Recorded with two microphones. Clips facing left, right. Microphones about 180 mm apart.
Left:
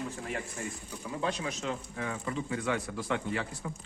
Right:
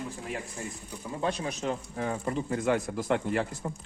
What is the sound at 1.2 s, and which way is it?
Speech, 35° right (ahead or behind).